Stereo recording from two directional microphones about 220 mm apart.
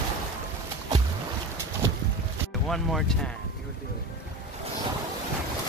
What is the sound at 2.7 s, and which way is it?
Speech, centre (ahead or behind).